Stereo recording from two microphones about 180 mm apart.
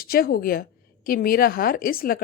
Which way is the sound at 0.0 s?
55° left (ahead or behind).